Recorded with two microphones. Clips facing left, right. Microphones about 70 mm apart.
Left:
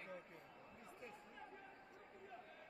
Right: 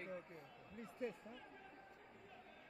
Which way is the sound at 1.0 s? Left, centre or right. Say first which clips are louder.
Right 12 dB; right.